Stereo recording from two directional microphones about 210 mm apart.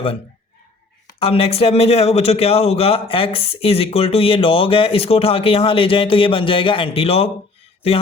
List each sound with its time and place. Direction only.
1.2 s a man's voice: 30° left (ahead or behind)